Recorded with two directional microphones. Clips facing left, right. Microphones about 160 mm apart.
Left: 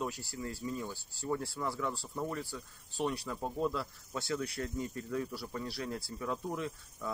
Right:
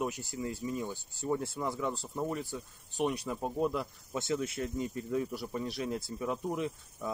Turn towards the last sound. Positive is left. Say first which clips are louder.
# right 3 dB
turn(degrees=-20)  # may be behind; listen again after turning